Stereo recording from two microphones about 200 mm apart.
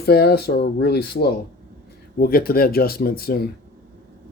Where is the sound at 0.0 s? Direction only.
50° left (ahead or behind).